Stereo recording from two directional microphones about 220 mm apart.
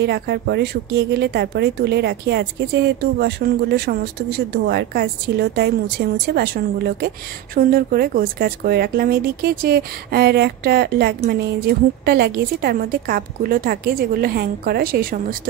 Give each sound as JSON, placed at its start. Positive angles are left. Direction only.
{"t": 0.0, "sound": "speech", "side_deg": -50}